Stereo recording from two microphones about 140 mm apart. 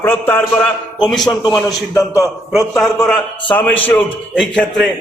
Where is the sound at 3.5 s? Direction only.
15° left (ahead or behind).